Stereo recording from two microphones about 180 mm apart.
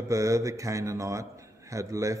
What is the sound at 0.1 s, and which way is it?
A man's voice, 15° right (ahead or behind).